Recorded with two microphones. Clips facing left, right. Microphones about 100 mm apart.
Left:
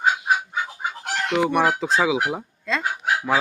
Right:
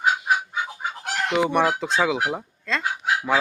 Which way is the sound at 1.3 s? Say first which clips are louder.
Left 1 dB; centre (ahead or behind).